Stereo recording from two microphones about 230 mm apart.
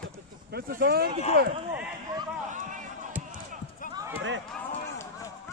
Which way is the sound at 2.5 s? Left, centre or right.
Right.